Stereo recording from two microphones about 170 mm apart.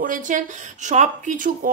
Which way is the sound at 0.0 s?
50° right (ahead or behind).